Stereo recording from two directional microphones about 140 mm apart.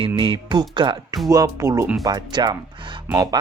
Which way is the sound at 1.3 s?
25° right (ahead or behind).